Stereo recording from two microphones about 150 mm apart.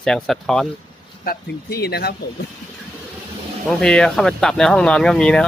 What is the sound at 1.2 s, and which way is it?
Speech, 85° left.